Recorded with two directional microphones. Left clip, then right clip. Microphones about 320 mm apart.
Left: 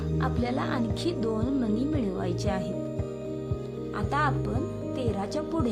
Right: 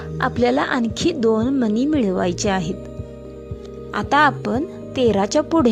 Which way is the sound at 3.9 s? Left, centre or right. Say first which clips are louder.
Right 12 dB; right.